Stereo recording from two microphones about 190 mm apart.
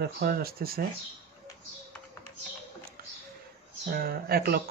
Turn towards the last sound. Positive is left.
turn(degrees=-55)  # may be behind; listen again after turning